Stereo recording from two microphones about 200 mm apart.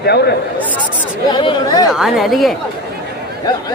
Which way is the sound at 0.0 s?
55° left (ahead or behind).